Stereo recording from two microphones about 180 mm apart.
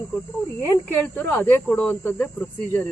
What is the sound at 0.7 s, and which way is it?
Speech, 10° left (ahead or behind).